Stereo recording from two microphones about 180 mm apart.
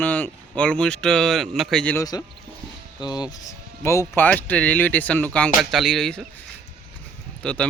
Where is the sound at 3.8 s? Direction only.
15° left (ahead or behind).